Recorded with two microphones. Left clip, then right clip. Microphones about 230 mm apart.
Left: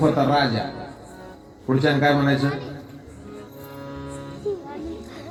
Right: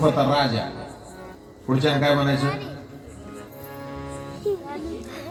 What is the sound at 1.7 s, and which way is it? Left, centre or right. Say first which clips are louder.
Speech: left 1 dB; right.